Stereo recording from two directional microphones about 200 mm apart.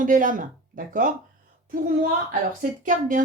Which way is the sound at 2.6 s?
40° right (ahead or behind).